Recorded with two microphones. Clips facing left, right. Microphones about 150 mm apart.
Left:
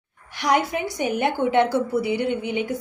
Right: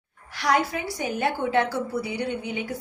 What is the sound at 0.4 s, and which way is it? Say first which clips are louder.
A woman's voice: left 2 dB; 20° left (ahead or behind).